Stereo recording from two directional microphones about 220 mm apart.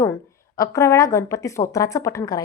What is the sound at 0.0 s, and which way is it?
A woman's voice, 15° left (ahead or behind).